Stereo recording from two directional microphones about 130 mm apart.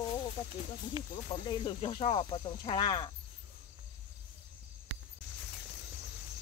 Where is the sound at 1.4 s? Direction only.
35° left (ahead or behind).